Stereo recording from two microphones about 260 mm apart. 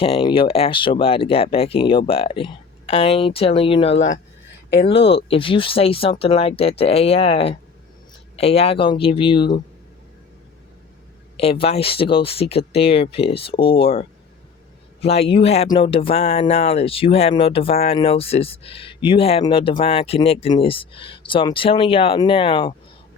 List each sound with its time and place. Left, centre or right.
0.0 s speech: centre
11.3 s speech: left